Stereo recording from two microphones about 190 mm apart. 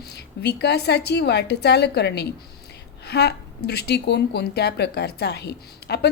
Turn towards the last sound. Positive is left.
turn(degrees=60)  # may be behind; listen again after turning